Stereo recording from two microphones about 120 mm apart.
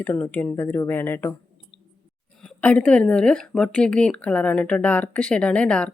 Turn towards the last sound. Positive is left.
turn(degrees=10)  # may be behind; listen again after turning